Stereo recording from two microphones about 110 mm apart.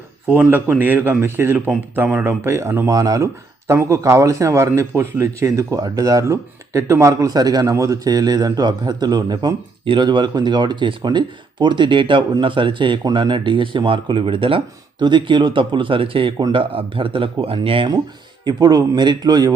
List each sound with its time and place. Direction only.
0.3 s a man's voice: 15° right (ahead or behind); by 17.8 s 55° right (ahead or behind)
18.4 s a man's voice: 40° right (ahead or behind)